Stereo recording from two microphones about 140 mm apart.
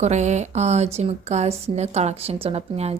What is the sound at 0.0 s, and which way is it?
Speech, 55° right (ahead or behind).